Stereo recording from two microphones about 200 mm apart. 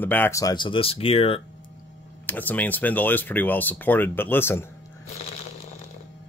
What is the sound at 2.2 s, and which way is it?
Speech, 10° left (ahead or behind).